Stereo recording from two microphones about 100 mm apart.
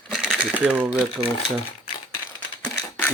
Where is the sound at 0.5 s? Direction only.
15° right (ahead or behind).